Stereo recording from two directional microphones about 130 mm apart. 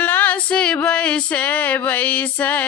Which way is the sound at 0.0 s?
15° left (ahead or behind).